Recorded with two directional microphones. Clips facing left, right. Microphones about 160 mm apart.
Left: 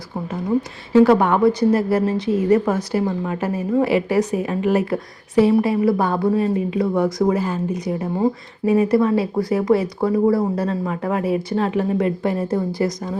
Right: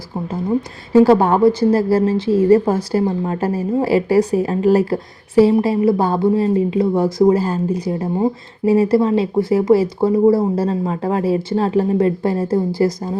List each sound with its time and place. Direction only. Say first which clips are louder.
0.9 s a woman's voice: right 2 dB; 30° right (ahead or behind)